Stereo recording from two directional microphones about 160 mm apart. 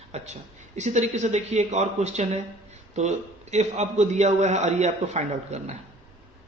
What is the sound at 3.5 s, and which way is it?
A man's voice, 45° right (ahead or behind).